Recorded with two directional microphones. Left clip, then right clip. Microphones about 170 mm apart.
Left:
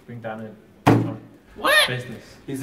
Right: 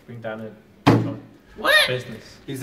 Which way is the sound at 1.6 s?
50° left (ahead or behind).